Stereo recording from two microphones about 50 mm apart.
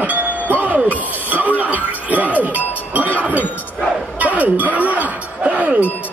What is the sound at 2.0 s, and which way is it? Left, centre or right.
Music, right.